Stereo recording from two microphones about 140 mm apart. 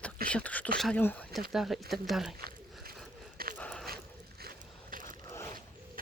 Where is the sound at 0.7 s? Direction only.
5° left (ahead or behind).